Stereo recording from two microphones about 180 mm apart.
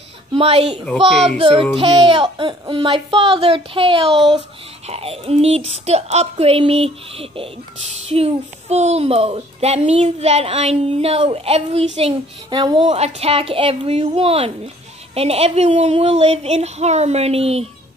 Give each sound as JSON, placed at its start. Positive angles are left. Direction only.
{"t": 0.3, "sound": "a woman's voice", "side_deg": -30}